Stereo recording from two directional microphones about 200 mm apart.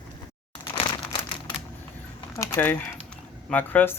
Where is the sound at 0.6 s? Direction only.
25° left (ahead or behind).